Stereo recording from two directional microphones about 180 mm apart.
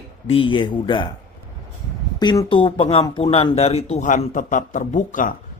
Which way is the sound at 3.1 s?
20° left (ahead or behind).